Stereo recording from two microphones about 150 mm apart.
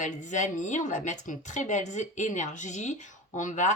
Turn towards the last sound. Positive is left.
turn(degrees=55)  # may be behind; listen again after turning